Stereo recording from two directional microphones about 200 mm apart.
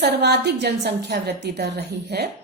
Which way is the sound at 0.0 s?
55° right (ahead or behind).